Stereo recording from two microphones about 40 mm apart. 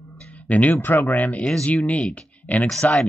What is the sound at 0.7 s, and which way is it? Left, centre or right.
Speech, left.